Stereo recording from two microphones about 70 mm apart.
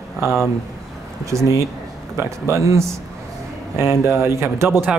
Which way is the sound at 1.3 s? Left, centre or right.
Right.